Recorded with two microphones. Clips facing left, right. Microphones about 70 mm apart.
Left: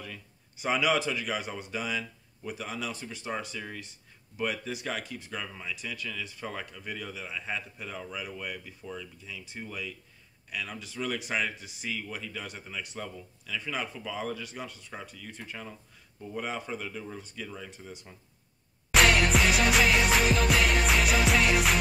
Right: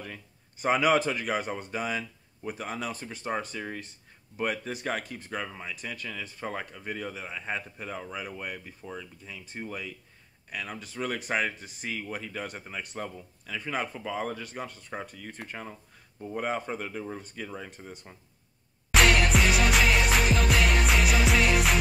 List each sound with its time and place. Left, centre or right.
0.0 s speech: right
18.9 s music: centre